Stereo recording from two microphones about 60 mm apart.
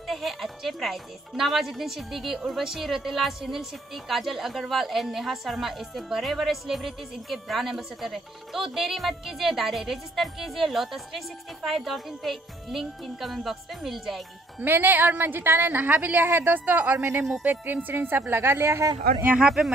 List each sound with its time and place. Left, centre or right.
0.0 s speech: centre
14.6 s a woman's voice: right
17.0 s speech: right
17.4 s a woman's voice: right